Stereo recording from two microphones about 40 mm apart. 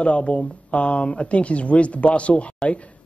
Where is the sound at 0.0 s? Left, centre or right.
Left.